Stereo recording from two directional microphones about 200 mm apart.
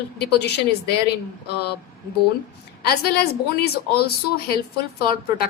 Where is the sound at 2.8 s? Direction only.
50° left (ahead or behind).